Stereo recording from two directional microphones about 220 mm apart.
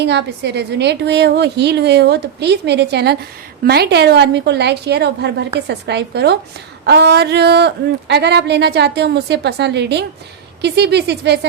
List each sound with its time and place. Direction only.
0.0 s speech: 50° right (ahead or behind)